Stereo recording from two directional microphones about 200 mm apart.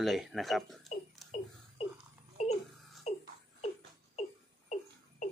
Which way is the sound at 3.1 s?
35° left (ahead or behind).